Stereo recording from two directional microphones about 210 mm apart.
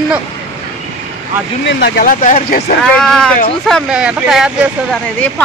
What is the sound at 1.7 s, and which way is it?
Speech, 55° left (ahead or behind).